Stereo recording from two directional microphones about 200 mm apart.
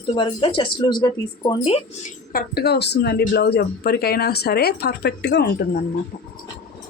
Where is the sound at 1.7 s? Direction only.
40° left (ahead or behind); by 5.8 s 55° left (ahead or behind).